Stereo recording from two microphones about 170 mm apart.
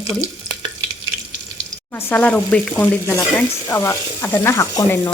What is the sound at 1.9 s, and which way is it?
Stir, 10° left (ahead or behind).